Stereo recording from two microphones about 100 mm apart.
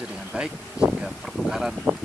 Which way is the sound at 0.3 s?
10° right (ahead or behind).